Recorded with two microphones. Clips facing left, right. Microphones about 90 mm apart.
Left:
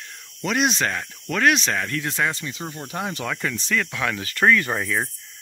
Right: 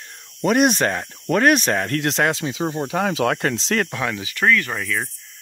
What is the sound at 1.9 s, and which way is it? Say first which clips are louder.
Speech: right 5 dB; 70° right (ahead or behind).